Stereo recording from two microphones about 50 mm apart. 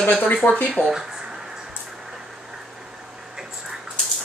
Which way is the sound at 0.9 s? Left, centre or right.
Centre.